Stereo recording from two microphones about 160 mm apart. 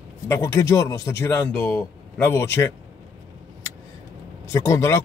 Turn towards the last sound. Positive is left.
turn(degrees=15)  # may be behind; listen again after turning